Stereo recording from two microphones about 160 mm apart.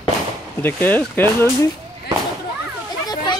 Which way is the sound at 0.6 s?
10° left (ahead or behind).